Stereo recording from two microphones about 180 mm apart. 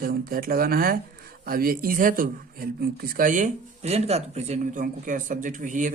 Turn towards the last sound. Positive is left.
turn(degrees=-45)  # may be behind; listen again after turning